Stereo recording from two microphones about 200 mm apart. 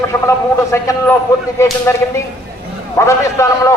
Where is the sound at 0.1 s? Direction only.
15° left (ahead or behind).